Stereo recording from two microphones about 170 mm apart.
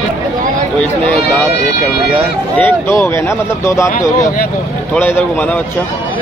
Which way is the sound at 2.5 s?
10° left (ahead or behind).